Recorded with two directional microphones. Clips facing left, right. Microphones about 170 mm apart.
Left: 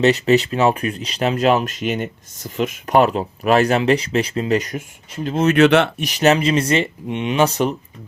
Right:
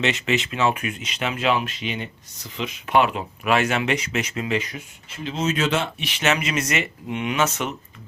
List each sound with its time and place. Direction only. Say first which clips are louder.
0.0 s speech: left 9 dB; 40° left (ahead or behind)
5.2 s speech: left 10 dB; 55° left (ahead or behind)
6.0 s speech: left 8 dB; 40° left (ahead or behind)